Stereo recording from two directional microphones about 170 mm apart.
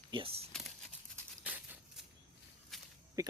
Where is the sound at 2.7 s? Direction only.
Centre (ahead or behind).